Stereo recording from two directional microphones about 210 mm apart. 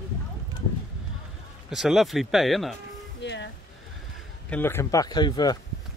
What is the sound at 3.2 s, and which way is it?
Music, 55° left (ahead or behind).